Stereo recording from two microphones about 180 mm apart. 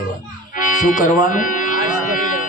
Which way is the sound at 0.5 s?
45° left (ahead or behind).